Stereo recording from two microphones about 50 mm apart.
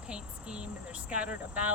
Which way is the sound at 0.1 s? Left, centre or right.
Right.